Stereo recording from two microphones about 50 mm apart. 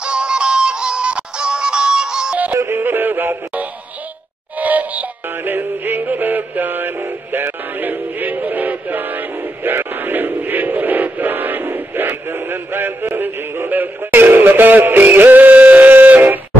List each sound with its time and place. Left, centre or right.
0.0 s music: centre
2.5 s music: right
4.6 s synthetic singing: right
13.7 s music: right